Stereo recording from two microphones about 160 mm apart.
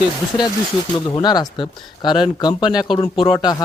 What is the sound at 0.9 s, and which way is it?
Speech, 25° left (ahead or behind).